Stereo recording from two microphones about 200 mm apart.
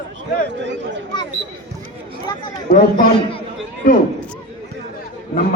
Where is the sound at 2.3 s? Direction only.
15° left (ahead or behind).